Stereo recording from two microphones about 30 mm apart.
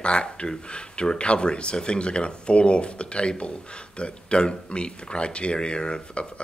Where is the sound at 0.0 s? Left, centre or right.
Left.